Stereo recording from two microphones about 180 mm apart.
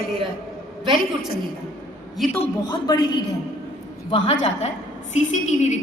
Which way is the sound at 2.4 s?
25° left (ahead or behind).